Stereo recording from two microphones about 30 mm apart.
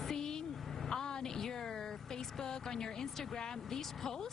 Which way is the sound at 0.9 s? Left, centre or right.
Left.